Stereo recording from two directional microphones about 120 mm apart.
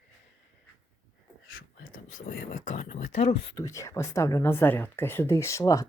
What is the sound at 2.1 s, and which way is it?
Speech, 90° left.